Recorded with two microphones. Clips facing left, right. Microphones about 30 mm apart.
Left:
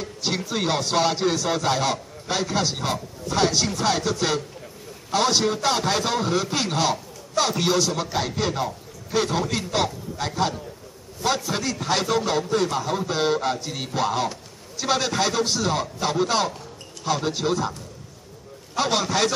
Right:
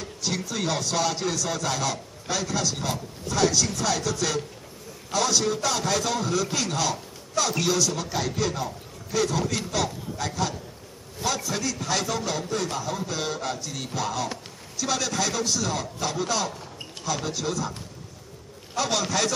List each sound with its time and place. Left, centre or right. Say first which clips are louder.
0.0 s a man's voice: left 3 dB; left
18.8 s a man's voice: left 3 dB; left